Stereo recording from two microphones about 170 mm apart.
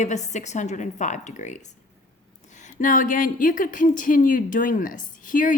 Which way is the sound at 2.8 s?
50° left (ahead or behind).